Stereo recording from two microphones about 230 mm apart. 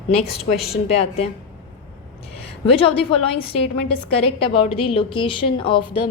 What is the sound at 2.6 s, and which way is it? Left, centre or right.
A woman's voice, left.